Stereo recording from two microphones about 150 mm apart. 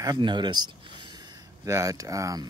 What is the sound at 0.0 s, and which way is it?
Speech, 30° right (ahead or behind).